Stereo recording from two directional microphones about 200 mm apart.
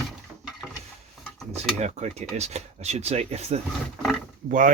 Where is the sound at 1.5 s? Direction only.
35° right (ahead or behind).